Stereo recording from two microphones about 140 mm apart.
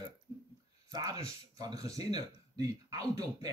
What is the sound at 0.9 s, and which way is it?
Speech, 25° right (ahead or behind).